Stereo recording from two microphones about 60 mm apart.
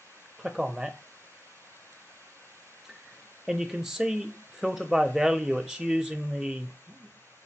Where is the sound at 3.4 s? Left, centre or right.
Centre.